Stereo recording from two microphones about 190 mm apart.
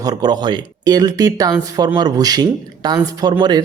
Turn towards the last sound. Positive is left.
turn(degrees=-25)  # may be behind; listen again after turning